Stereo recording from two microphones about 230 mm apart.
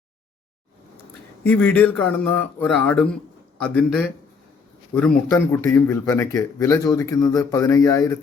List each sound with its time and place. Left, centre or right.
1.5 s a man's voice: centre